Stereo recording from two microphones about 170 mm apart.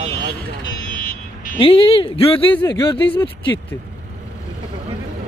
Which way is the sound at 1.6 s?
30° left (ahead or behind).